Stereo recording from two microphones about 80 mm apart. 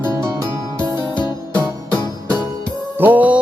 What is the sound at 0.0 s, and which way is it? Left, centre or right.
Music, right.